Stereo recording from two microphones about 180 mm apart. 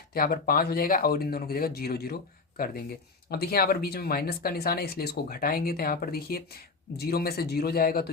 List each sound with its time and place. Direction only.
0.1 s speech: 55° left (ahead or behind)
3.2 s speech: 60° left (ahead or behind)